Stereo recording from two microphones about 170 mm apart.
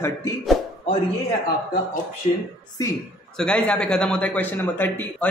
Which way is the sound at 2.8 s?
20° left (ahead or behind).